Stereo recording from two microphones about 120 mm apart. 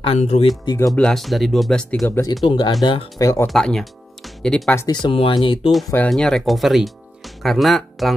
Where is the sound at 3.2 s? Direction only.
30° left (ahead or behind).